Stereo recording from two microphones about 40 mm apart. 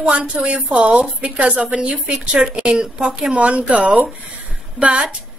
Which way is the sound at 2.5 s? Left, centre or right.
Right.